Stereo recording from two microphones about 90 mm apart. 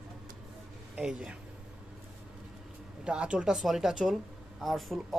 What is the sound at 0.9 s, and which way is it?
Speech, 10° right (ahead or behind).